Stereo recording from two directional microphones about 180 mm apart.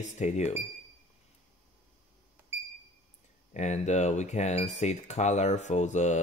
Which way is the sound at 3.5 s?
40° left (ahead or behind).